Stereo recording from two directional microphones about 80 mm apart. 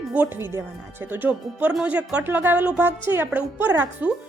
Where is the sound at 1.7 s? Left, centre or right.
Centre.